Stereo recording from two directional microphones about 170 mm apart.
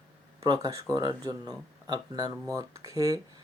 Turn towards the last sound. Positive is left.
turn(degrees=-20)  # may be behind; listen again after turning